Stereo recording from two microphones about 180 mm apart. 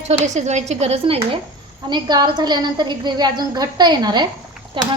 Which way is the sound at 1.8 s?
25° right (ahead or behind).